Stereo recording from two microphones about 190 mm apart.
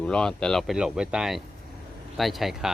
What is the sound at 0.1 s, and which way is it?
Speech, 5° left (ahead or behind).